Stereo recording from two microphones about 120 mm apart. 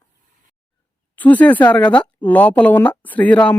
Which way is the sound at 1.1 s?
15° left (ahead or behind).